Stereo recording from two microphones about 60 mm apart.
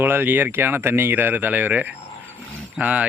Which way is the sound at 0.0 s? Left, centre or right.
Right.